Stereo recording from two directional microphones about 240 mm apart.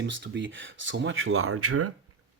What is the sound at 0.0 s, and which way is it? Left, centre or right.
Speech, right.